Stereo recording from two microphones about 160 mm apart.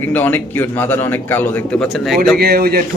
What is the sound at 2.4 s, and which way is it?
Speech, 70° right (ahead or behind).